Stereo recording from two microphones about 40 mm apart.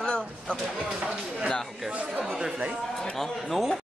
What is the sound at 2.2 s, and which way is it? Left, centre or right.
Speech, centre.